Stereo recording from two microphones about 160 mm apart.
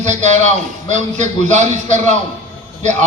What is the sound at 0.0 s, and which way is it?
A man's voice, 50° right (ahead or behind).